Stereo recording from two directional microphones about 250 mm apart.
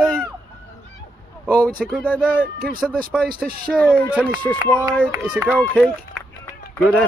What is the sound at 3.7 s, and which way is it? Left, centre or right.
Speech, centre.